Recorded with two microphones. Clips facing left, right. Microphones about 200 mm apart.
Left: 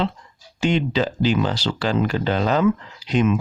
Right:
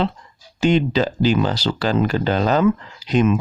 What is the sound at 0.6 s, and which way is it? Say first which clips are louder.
Speech: right 3 dB; 40° right (ahead or behind).